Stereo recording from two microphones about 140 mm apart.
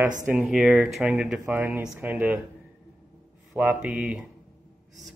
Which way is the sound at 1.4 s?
15° right (ahead or behind).